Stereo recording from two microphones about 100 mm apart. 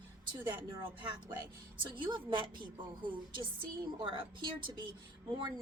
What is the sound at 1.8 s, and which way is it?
Speech, 55° right (ahead or behind).